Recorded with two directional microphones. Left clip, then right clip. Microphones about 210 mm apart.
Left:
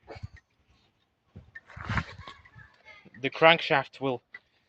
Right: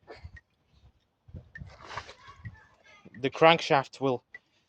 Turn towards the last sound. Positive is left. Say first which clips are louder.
# right 1 dB
turn(degrees=-25)  # may be behind; listen again after turning